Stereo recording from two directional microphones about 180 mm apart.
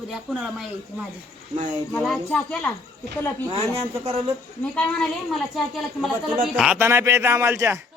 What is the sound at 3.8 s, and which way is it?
Speech, 35° right (ahead or behind).